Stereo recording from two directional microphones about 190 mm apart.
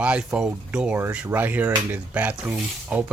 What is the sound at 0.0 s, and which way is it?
Speech, 5° right (ahead or behind).